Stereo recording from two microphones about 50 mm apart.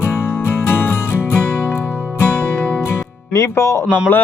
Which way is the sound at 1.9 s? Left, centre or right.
Right.